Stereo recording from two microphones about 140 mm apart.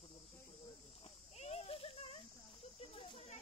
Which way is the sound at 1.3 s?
50° left (ahead or behind).